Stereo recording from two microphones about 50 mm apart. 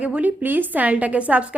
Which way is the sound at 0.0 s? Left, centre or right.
Right.